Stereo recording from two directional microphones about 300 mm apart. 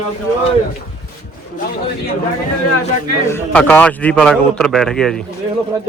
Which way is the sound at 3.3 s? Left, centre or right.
Centre.